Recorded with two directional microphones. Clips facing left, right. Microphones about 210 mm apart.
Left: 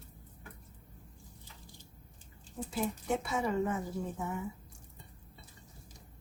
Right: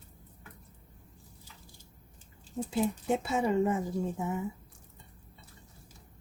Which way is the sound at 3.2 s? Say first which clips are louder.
Right 6 dB; 25° right (ahead or behind).